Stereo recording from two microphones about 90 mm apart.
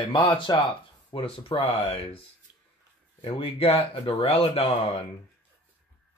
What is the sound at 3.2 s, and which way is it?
Speech, 90° left.